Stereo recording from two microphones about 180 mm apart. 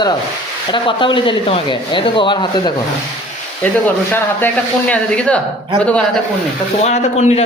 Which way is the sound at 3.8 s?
10° left (ahead or behind).